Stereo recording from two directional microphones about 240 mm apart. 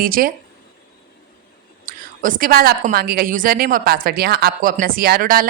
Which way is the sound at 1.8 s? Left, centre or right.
Right.